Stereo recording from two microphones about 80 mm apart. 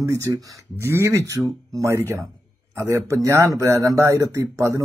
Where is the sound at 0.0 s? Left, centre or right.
Right.